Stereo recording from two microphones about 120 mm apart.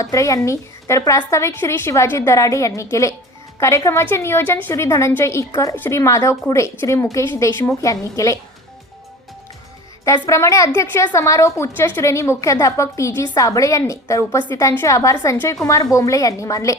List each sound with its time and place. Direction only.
0.0 s a woman's voice: 25° left (ahead or behind)
10.2 s a woman's voice: 25° left (ahead or behind)